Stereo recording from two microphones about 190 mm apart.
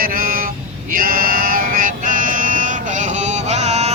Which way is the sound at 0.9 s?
50° right (ahead or behind).